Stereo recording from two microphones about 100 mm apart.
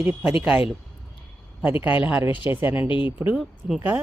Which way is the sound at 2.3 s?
55° left (ahead or behind).